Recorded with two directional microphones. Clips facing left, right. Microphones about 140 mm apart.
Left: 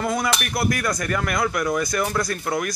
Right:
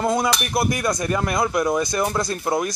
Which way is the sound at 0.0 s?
25° right (ahead or behind).